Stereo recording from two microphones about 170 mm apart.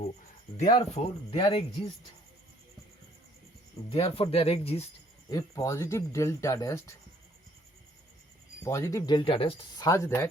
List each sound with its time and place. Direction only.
0.8 s speech: 40° left (ahead or behind)
3.8 s speech: 30° left (ahead or behind)
5.3 s speech: 20° left (ahead or behind)
8.6 s speech: 15° left (ahead or behind)
9.8 s speech: 15° left (ahead or behind)